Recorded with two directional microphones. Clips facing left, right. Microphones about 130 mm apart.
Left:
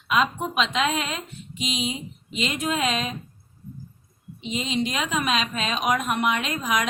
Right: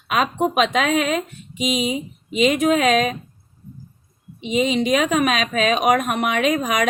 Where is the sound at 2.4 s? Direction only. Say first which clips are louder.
Right 9 dB; 55° right (ahead or behind).